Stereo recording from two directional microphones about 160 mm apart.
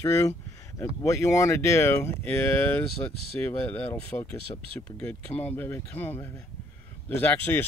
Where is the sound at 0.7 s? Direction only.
20° left (ahead or behind).